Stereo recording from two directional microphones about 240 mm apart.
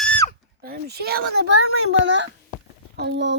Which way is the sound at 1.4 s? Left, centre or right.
Right.